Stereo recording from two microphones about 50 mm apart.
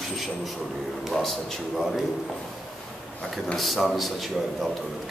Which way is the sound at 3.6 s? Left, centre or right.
Centre.